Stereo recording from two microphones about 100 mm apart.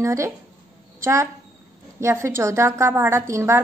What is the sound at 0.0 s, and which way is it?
A woman's voice, 30° right (ahead or behind).